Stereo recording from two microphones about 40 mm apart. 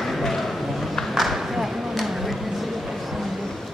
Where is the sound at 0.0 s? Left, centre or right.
Centre.